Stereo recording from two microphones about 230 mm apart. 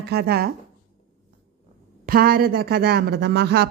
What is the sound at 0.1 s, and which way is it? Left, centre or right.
Speech, right.